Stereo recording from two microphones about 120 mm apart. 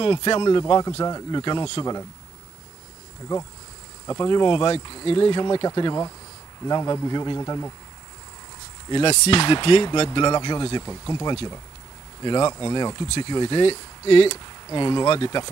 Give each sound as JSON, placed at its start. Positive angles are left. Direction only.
{"t": 0.0, "sound": "speech", "side_deg": 45}
{"t": 1.0, "sound": "speech", "side_deg": 25}
{"t": 1.4, "sound": "speech", "side_deg": 40}
{"t": 1.8, "sound": "speech", "side_deg": 30}
{"t": 4.0, "sound": "insect", "side_deg": 25}
{"t": 4.3, "sound": "speech", "side_deg": 40}
{"t": 8.9, "sound": "speech", "side_deg": 60}
{"t": 10.0, "sound": "speech", "side_deg": 40}
{"t": 10.9, "sound": "speech", "side_deg": 25}
{"t": 12.2, "sound": "speech", "side_deg": 40}
{"t": 13.6, "sound": "speech", "side_deg": 55}
{"t": 14.7, "sound": "speech", "side_deg": 40}